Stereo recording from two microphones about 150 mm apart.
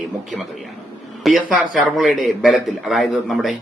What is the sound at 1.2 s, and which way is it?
A man's voice, 5° right (ahead or behind).